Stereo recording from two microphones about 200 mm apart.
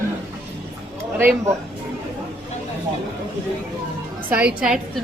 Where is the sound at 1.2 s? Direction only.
10° right (ahead or behind).